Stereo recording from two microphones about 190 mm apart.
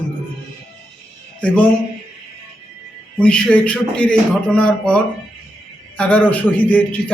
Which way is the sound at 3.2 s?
5° left (ahead or behind).